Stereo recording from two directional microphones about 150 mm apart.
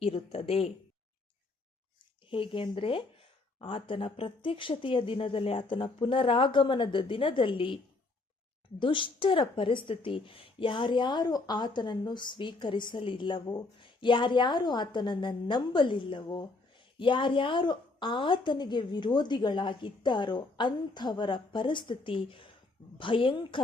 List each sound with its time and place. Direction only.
0.0 s a woman's voice: 40° left (ahead or behind)
2.3 s a woman's voice: 35° left (ahead or behind)
8.8 s a woman's voice: 35° left (ahead or behind)